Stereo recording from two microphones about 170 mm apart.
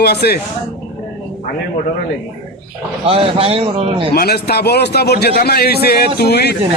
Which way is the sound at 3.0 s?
35° right (ahead or behind).